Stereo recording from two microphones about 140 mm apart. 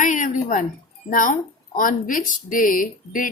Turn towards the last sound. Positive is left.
turn(degrees=75)  # may be behind; listen again after turning